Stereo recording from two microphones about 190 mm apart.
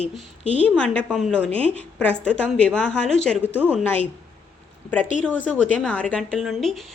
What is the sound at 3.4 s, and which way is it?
Speech, 10° right (ahead or behind).